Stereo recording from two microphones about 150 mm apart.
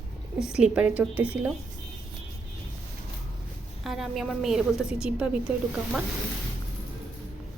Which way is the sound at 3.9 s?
Centre (ahead or behind).